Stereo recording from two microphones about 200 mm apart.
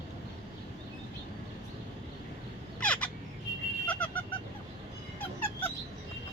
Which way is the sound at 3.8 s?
10° left (ahead or behind).